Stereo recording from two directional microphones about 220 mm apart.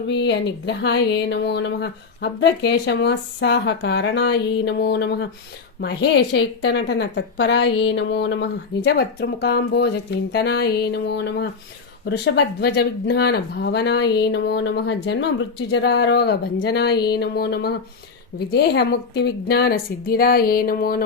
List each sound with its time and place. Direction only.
0.1 s speech: 50° left (ahead or behind)